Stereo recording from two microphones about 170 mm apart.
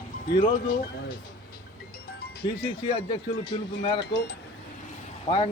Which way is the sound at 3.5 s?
30° left (ahead or behind).